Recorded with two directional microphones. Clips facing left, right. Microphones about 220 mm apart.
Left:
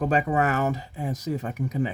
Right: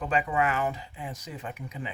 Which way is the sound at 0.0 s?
40° left (ahead or behind).